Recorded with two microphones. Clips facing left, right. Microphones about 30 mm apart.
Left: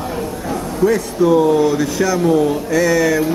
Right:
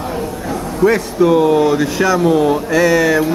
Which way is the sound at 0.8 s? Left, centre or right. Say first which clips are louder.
Right 2 dB; right.